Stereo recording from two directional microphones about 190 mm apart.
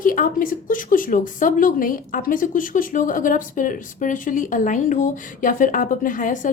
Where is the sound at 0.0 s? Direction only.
45° left (ahead or behind).